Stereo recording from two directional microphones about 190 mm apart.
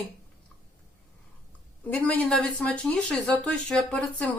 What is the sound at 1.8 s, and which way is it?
Speech, 10° left (ahead or behind).